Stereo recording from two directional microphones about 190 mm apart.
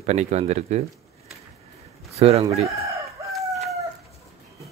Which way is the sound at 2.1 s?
35° right (ahead or behind).